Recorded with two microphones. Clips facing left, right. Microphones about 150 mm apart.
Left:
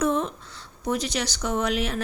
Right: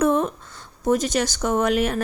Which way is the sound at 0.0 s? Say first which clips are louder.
Right 4 dB; 55° right (ahead or behind).